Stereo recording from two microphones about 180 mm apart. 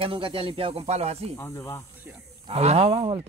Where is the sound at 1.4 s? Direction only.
15° left (ahead or behind).